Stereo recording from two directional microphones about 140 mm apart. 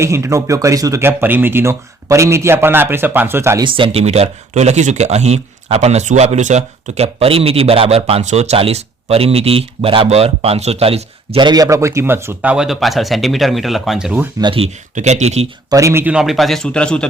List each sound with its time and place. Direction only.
0.0 s speech: 20° right (ahead or behind)
3.6 s speech: 35° right (ahead or behind); by 14.3 s 5° right (ahead or behind)
14.4 s speech: 40° right (ahead or behind)
14.9 s speech: 55° right (ahead or behind)
15.7 s speech: 20° right (ahead or behind)
16.1 s a man's voice: centre (ahead or behind)